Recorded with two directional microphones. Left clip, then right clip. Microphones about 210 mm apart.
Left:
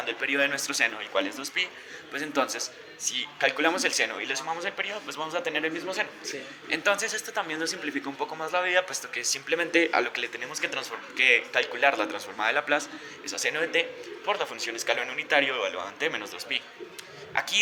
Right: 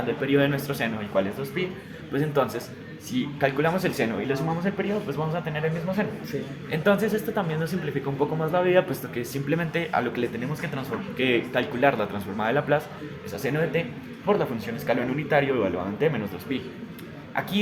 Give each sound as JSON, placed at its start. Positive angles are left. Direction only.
{"t": 0.2, "sound": "a man's voice", "side_deg": 35}